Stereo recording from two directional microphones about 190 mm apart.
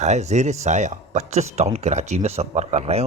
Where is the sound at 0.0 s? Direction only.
35° right (ahead or behind).